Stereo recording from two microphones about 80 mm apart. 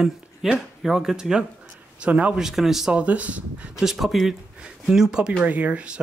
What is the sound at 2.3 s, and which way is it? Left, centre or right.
Speech, centre.